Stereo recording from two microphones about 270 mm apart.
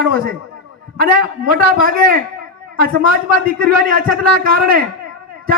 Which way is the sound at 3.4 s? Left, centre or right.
Right.